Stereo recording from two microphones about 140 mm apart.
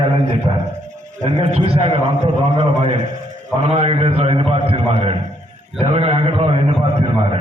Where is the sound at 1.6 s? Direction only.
45° right (ahead or behind).